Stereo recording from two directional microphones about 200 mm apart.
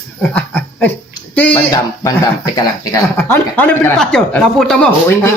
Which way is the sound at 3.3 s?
10° left (ahead or behind).